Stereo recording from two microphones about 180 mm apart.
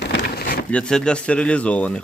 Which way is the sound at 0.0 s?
75° left (ahead or behind).